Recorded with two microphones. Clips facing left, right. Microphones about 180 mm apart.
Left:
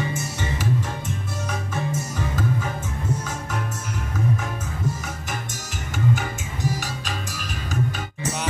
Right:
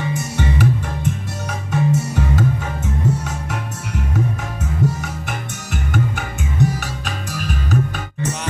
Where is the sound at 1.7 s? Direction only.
70° right (ahead or behind).